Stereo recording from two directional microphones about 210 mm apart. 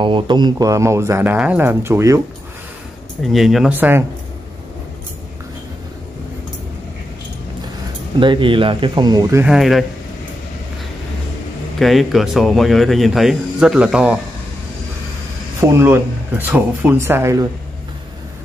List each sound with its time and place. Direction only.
0.0 s speech: 20° right (ahead or behind)
3.2 s speech: centre (ahead or behind)
8.2 s speech: 25° right (ahead or behind)
9.5 s speech: centre (ahead or behind)
11.8 s speech: centre (ahead or behind)
15.7 s speech: 10° right (ahead or behind)